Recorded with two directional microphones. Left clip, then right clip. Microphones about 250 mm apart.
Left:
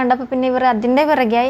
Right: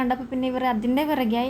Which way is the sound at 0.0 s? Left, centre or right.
Centre.